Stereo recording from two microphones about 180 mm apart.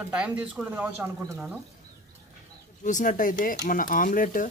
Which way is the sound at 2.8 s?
45° left (ahead or behind).